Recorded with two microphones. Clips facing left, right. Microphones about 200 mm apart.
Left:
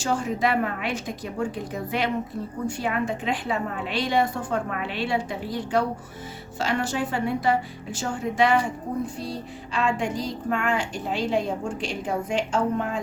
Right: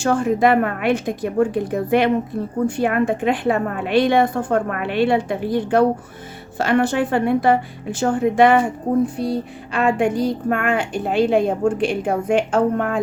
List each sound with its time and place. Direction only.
0.0 s speech: 55° right (ahead or behind)